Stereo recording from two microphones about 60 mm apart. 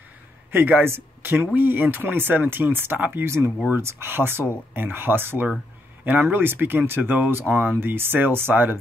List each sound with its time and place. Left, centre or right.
0.5 s speech: right